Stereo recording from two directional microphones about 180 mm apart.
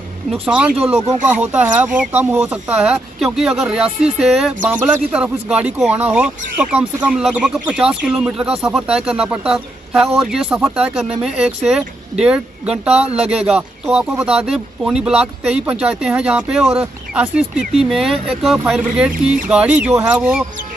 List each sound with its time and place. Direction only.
0.3 s speech: 5° right (ahead or behind)
12.9 s speech: 35° right (ahead or behind)
13.2 s speech: 5° right (ahead or behind)